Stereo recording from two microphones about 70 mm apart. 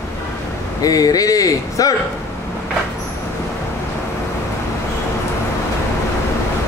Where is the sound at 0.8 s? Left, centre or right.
Left.